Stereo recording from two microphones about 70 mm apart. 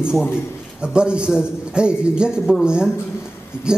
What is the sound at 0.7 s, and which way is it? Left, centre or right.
A man's voice, centre.